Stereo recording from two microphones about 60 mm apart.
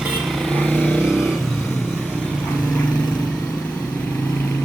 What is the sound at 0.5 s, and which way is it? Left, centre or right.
Vehicle, centre.